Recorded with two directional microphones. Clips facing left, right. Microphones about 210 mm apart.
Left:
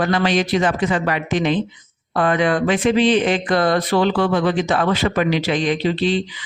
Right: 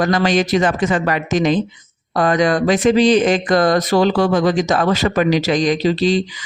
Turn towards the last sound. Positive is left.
turn(degrees=-40)  # may be behind; listen again after turning